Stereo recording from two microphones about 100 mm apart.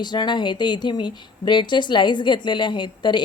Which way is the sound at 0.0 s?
45° left (ahead or behind).